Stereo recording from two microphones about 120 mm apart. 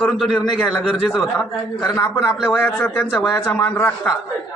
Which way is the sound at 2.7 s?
15° left (ahead or behind).